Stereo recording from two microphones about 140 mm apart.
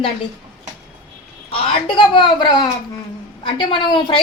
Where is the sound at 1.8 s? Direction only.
35° left (ahead or behind).